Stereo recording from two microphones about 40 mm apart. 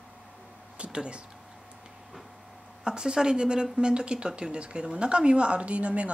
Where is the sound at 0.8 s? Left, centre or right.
Right.